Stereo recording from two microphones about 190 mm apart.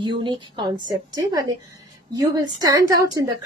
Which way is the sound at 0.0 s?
25° right (ahead or behind).